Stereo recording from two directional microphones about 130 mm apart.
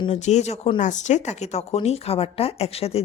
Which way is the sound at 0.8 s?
70° left (ahead or behind).